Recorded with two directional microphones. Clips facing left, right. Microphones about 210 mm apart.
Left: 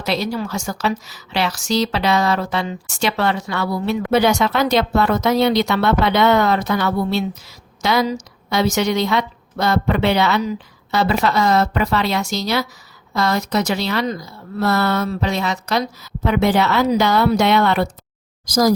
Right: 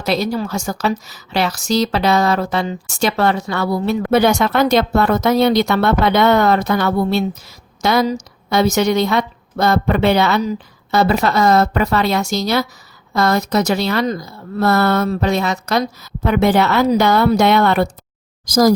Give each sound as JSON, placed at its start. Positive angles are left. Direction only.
{"t": 0.0, "sound": "a woman's voice", "side_deg": -45}